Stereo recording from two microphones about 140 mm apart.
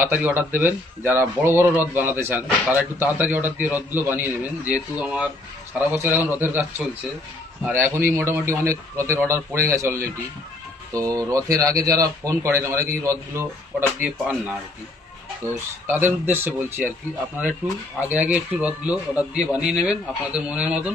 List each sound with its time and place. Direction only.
0.0 s a man's voice: 15° right (ahead or behind)
15.4 s a man's voice: 15° right (ahead or behind)
18.0 s a man's voice: 10° right (ahead or behind)